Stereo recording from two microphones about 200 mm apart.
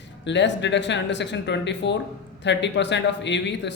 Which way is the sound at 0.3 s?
60° left (ahead or behind).